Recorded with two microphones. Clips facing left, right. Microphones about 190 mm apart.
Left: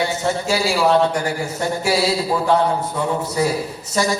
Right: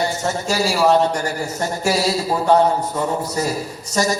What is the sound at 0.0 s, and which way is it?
A man's voice, 45° right (ahead or behind).